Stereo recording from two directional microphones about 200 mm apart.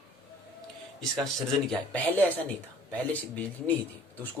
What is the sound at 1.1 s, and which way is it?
A man's voice, centre (ahead or behind).